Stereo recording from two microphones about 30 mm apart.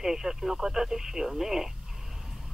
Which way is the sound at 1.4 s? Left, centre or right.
Centre.